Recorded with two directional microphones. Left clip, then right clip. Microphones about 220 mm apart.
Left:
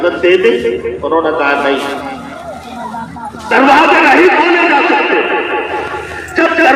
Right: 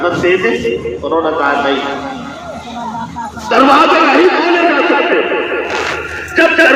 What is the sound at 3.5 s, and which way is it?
Speech, 15° right (ahead or behind).